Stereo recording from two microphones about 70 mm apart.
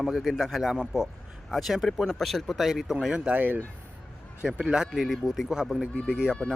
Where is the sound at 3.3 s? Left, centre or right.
Right.